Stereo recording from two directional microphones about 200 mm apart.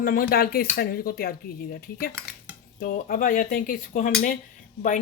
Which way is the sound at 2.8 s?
45° left (ahead or behind).